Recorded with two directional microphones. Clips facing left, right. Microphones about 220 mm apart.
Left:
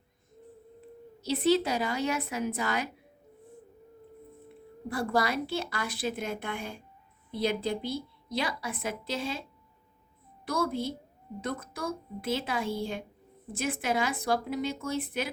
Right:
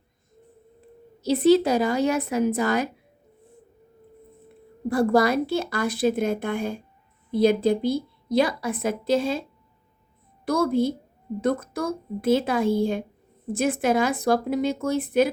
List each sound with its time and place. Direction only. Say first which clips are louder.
1.2 s a woman's voice: right 8 dB; 40° right (ahead or behind)
4.9 s a woman's voice: right 9 dB; 45° right (ahead or behind)
10.4 s a woman's voice: right 9 dB; 45° right (ahead or behind)